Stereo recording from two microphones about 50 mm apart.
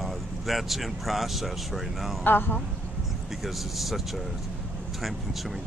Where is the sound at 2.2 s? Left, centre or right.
Left.